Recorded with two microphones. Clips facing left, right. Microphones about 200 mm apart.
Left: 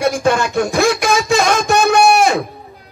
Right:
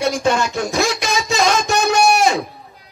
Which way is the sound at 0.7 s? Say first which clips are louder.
Left 5 dB; 55° left (ahead or behind).